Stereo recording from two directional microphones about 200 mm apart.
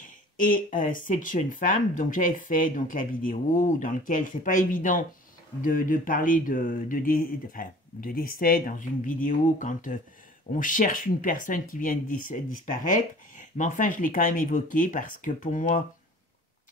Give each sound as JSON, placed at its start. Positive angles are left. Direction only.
{"t": 0.4, "sound": "speech", "side_deg": 40}